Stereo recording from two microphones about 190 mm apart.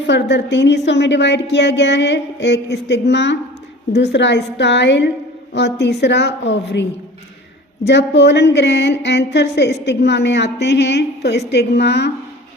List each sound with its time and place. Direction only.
0.0 s a woman's voice: 70° left (ahead or behind)
7.9 s speech: 65° left (ahead or behind)